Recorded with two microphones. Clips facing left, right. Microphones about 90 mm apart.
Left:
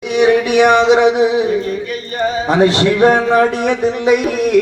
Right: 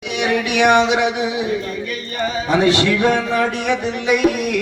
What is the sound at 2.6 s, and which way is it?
A man's voice, 35° left (ahead or behind).